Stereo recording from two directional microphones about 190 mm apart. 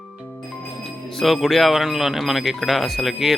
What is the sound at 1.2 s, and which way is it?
Speech, centre (ahead or behind).